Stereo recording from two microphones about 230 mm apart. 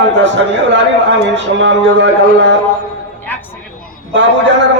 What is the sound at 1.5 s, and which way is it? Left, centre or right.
Speech, right.